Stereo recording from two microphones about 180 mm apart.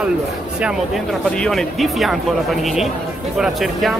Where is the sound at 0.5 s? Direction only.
5° right (ahead or behind).